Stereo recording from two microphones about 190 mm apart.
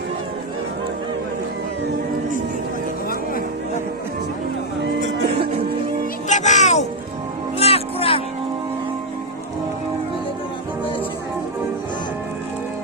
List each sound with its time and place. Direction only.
6.2 s music: 40° left (ahead or behind)